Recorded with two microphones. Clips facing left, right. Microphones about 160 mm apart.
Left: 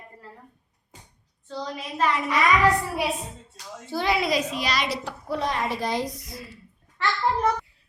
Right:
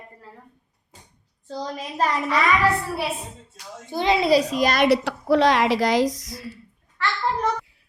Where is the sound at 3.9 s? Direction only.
20° right (ahead or behind); by 6.3 s 90° right.